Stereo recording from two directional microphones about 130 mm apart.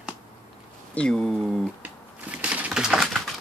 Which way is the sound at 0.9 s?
5° left (ahead or behind).